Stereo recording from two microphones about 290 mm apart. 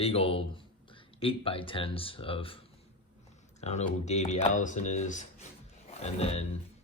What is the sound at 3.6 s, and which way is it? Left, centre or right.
Speech, left.